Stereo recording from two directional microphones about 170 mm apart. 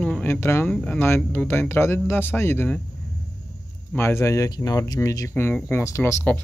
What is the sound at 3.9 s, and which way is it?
Speech, 15° left (ahead or behind).